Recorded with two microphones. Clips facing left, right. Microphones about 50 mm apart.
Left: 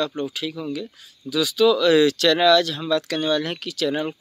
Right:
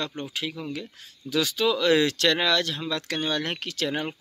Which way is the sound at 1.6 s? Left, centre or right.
Right.